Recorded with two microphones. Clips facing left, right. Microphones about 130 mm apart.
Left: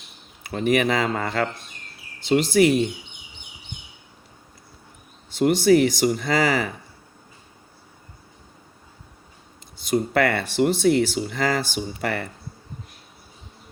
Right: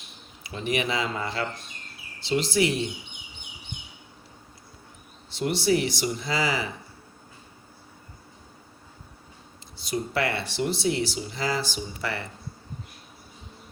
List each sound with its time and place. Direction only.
0.4 s speech: 50° left (ahead or behind)
5.3 s speech: 50° left (ahead or behind)
9.7 s speech: 50° left (ahead or behind)